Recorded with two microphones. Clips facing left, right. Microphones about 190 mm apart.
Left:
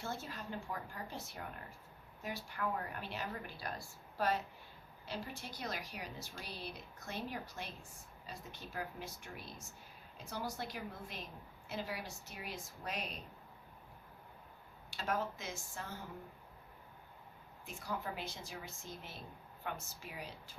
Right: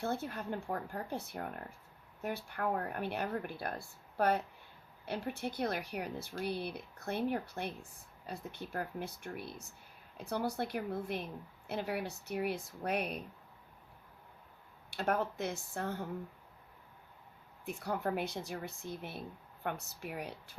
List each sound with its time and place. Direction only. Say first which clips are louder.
0.0 s speech: right 7 dB; 55° right (ahead or behind)
14.8 s speech: right 5 dB; 60° right (ahead or behind)
17.7 s speech: right 7 dB; 60° right (ahead or behind)